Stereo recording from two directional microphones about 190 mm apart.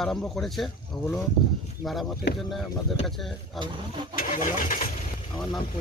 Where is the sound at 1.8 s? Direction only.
Centre (ahead or behind).